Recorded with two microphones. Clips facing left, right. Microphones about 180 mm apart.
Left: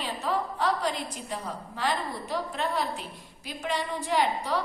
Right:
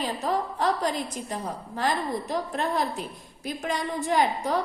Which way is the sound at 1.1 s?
45° right (ahead or behind).